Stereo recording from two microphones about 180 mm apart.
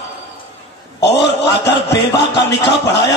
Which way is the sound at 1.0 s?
70° left (ahead or behind).